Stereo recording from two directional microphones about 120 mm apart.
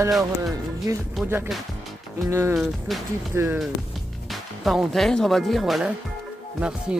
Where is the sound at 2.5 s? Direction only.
5° right (ahead or behind).